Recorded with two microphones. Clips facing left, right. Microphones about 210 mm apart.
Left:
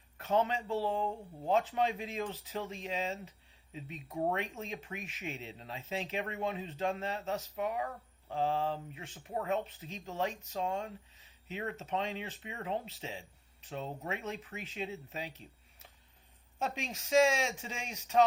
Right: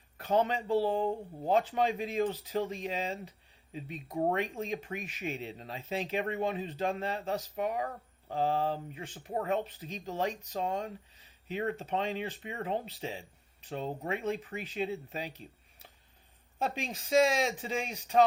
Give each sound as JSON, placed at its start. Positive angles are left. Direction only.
{"t": 0.2, "sound": "speech", "side_deg": -35}
{"t": 12.5, "sound": "speech", "side_deg": -45}
{"t": 16.6, "sound": "speech", "side_deg": -35}